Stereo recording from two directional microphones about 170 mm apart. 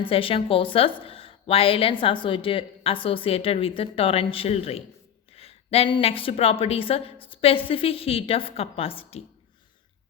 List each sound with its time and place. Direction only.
0.0 s a woman's voice: 35° left (ahead or behind)